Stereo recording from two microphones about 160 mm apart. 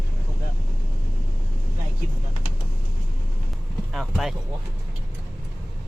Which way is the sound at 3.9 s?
Centre (ahead or behind).